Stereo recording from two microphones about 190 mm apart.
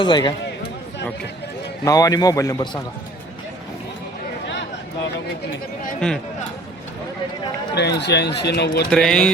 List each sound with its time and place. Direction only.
0.0 s a man's voice: 25° left (ahead or behind)
1.8 s a man's voice: 20° left (ahead or behind)
7.8 s speech: 65° left (ahead or behind)
8.9 s mantra: 5° left (ahead or behind)